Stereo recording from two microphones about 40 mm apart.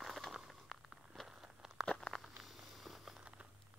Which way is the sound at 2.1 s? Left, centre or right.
Centre.